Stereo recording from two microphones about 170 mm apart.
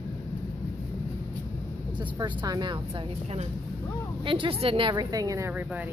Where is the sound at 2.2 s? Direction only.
25° right (ahead or behind).